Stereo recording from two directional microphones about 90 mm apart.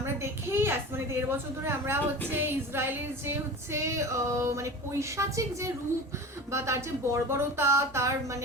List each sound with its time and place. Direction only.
0.0 s a woman's voice: 30° right (ahead or behind)